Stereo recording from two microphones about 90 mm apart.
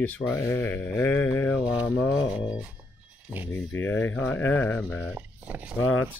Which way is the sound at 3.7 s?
25° left (ahead or behind).